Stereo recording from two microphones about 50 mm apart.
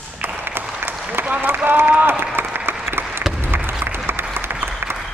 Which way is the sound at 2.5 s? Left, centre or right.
Right.